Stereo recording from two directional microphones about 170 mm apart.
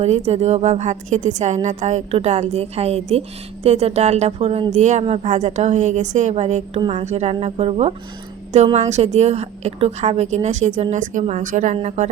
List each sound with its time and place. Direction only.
0.0 s a woman's voice: 40° right (ahead or behind)